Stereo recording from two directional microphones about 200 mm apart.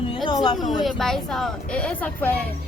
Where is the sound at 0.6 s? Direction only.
Centre (ahead or behind).